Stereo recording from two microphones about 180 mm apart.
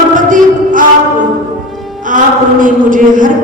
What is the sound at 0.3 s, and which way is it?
Music, 45° right (ahead or behind).